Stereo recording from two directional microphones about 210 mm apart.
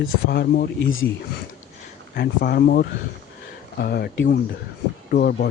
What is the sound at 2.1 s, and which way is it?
Speech, 50° left (ahead or behind).